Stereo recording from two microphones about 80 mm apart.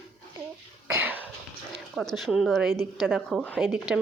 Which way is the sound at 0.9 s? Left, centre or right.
Right.